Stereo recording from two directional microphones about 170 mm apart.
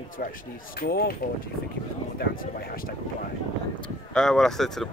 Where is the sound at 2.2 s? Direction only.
60° left (ahead or behind).